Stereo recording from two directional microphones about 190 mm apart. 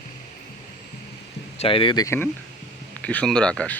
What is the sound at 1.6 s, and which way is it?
Speech, 30° left (ahead or behind).